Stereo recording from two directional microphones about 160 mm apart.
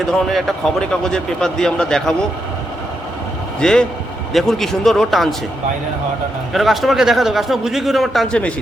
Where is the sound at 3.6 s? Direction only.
5° left (ahead or behind).